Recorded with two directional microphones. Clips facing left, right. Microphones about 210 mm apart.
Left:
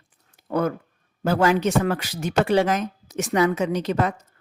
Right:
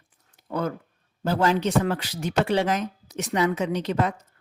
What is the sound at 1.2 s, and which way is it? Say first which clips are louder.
Speech: left 3 dB; 45° left (ahead or behind).